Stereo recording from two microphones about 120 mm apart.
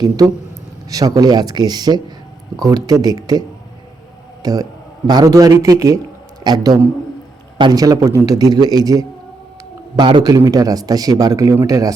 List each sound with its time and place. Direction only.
0.9 s a man's voice: 30° right (ahead or behind)
4.4 s a man's voice: 30° right (ahead or behind)
9.9 s a man's voice: 45° right (ahead or behind)